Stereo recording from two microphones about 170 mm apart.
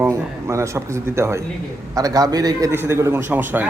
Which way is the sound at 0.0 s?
15° right (ahead or behind).